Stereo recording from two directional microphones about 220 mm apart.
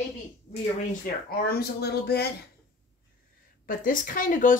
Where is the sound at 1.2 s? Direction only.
45° left (ahead or behind).